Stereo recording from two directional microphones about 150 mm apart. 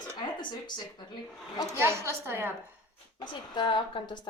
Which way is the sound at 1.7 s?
15° right (ahead or behind).